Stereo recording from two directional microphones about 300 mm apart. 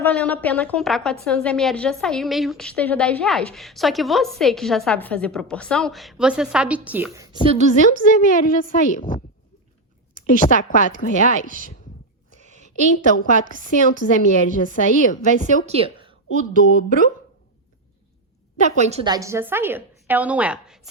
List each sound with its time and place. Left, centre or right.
0.0 s a woman's voice: centre
7.4 s a woman's voice: right
7.8 s a woman's voice: left
10.2 s a woman's voice: left
12.4 s a sound: right
13.5 s a woman's voice: right
14.0 s a woman's voice: left
15.6 s a woman's voice: centre
18.8 s a woman's voice: right; by 20.8 s centre